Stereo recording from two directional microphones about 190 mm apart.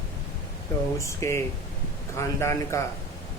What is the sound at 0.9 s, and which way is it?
A man's voice, 15° left (ahead or behind).